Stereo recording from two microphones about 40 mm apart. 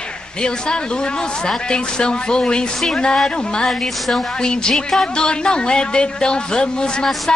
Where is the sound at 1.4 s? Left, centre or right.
Left.